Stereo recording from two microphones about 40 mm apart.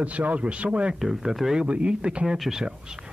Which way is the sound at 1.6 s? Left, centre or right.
Right.